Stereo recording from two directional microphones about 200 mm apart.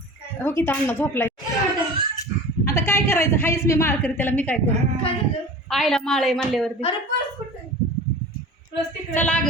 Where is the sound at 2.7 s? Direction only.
15° left (ahead or behind).